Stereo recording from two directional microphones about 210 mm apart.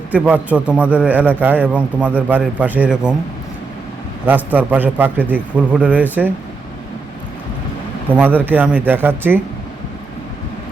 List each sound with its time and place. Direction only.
0.1 s a man's voice: 5° right (ahead or behind)
4.3 s a man's voice: 10° right (ahead or behind)
8.1 s a man's voice: 10° right (ahead or behind)